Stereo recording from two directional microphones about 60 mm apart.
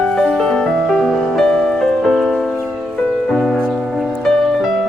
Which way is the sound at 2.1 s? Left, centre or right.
Centre.